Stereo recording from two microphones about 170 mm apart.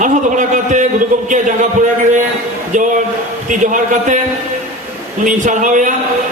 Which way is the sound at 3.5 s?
50° right (ahead or behind).